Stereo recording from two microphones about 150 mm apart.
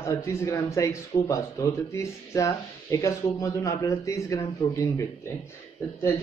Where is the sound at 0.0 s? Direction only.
20° left (ahead or behind).